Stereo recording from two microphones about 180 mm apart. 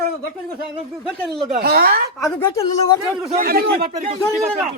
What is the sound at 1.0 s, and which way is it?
Speech, centre (ahead or behind).